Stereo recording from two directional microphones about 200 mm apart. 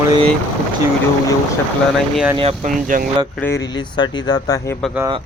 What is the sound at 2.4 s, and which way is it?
Speech, 30° right (ahead or behind).